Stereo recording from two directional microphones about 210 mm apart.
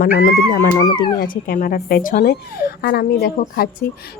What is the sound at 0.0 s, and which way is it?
Speech, 45° left (ahead or behind).